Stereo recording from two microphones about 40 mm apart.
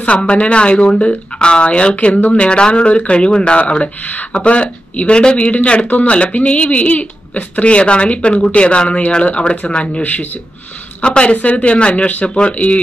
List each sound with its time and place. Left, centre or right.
0.0 s speech: left